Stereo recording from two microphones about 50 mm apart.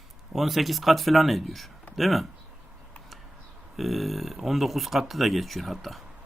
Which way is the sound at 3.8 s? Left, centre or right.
Centre.